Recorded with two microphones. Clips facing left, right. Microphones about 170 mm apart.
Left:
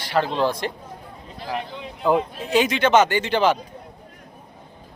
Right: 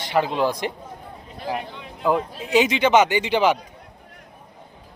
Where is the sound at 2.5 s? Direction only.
15° right (ahead or behind).